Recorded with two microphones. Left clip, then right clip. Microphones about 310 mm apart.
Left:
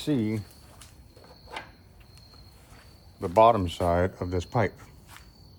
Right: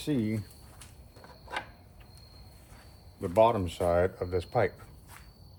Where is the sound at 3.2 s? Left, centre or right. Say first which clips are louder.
Left 5 dB; left.